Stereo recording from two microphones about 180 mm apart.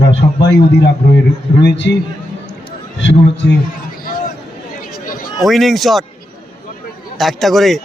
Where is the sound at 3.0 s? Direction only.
85° left.